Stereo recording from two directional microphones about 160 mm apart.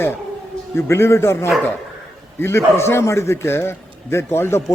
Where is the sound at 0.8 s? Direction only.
15° left (ahead or behind).